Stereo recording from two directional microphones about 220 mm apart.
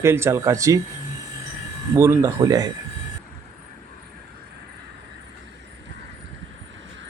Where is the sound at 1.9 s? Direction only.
10° right (ahead or behind).